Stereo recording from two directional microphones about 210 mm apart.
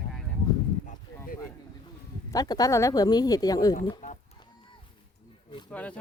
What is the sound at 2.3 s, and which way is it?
Speech, 20° left (ahead or behind).